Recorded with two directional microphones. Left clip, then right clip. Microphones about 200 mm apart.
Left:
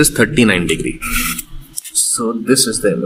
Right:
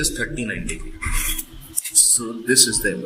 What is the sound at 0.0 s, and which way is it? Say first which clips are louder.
Speech: left 12 dB; 40° left (ahead or behind).